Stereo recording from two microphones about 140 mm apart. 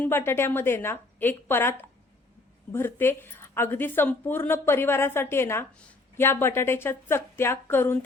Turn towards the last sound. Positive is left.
turn(degrees=15)  # may be behind; listen again after turning